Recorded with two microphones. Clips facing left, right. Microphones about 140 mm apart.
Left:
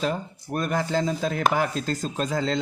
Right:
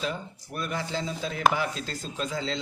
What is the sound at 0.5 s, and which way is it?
Speech, 45° left (ahead or behind).